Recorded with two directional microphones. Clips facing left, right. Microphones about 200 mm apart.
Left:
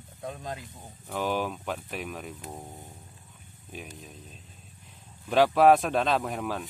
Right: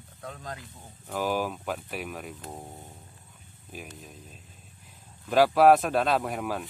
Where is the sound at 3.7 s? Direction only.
5° right (ahead or behind).